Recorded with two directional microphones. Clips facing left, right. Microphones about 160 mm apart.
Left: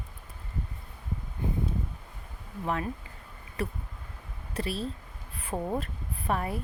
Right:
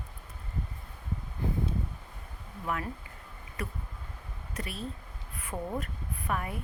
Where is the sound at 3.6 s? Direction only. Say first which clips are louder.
Left 5 dB; 30° left (ahead or behind).